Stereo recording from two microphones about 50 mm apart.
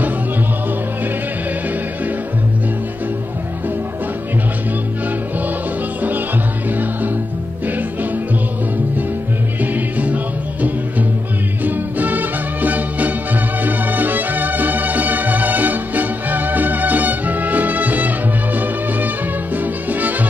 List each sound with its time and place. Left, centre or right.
9.6 s music: right